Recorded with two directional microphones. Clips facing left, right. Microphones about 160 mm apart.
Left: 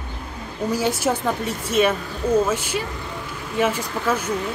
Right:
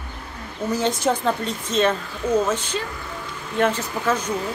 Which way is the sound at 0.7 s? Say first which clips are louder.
Even; 10° left (ahead or behind).